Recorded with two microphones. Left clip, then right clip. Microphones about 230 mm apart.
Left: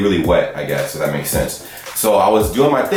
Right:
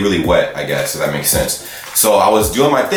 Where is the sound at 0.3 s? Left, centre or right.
Centre.